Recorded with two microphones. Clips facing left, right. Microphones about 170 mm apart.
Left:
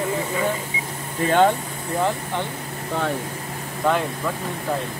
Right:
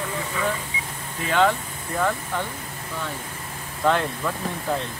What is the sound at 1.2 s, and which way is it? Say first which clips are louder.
Speech: left 3 dB; 45° left (ahead or behind).